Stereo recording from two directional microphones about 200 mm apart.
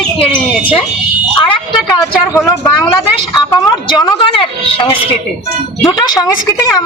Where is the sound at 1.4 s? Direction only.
25° left (ahead or behind).